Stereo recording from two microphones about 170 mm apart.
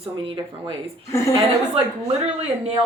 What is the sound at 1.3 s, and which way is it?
Speech, 35° right (ahead or behind).